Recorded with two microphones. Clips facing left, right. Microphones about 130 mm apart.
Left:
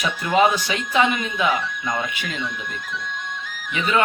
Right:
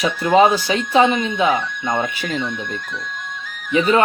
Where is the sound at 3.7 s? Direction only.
35° right (ahead or behind).